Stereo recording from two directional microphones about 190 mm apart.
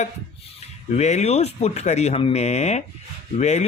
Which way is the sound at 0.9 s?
35° left (ahead or behind).